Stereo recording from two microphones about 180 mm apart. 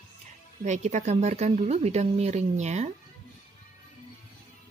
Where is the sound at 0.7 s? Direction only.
40° right (ahead or behind).